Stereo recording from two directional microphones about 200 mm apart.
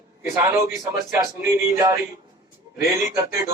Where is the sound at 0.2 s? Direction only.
15° right (ahead or behind).